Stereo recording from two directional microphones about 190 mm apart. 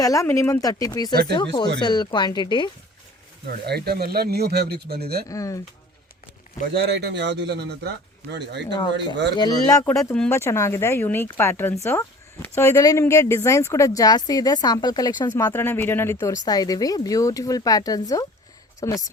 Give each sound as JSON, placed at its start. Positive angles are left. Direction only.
{"t": 0.0, "sound": "speech", "side_deg": 15}
{"t": 3.4, "sound": "speech", "side_deg": -55}
{"t": 5.3, "sound": "speech", "side_deg": 15}
{"t": 6.7, "sound": "speech", "side_deg": -60}
{"t": 9.3, "sound": "speech", "side_deg": 20}